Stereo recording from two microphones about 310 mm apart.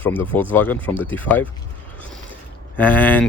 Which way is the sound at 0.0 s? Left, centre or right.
Centre.